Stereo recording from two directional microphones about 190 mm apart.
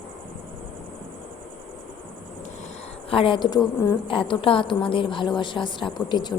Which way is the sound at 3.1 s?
30° left (ahead or behind).